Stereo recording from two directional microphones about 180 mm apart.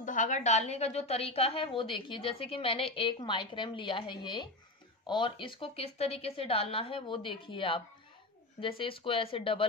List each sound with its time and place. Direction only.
0.0 s a woman's voice: 45° left (ahead or behind); by 9.7 s 30° left (ahead or behind)